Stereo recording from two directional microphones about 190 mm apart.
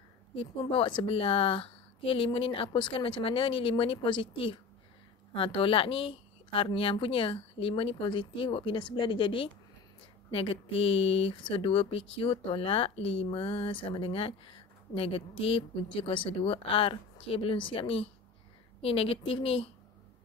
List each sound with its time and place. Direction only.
0.4 s a woman's voice: 25° left (ahead or behind)